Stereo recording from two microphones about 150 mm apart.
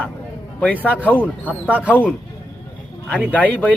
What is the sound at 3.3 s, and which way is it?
Speech, 10° left (ahead or behind).